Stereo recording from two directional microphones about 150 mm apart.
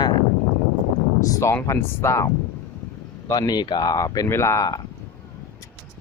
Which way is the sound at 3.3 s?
25° left (ahead or behind).